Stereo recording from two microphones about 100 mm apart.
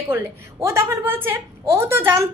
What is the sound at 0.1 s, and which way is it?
A woman's voice, 30° right (ahead or behind).